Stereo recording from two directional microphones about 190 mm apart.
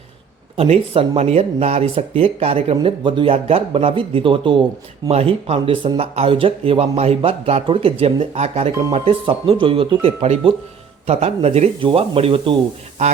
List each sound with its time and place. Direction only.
0.5 s speech: 30° right (ahead or behind)